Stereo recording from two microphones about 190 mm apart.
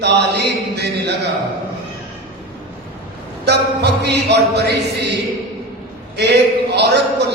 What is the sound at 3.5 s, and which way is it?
Speech, 60° right (ahead or behind).